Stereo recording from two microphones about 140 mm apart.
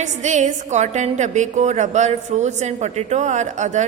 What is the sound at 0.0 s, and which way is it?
A woman's voice, 60° right (ahead or behind).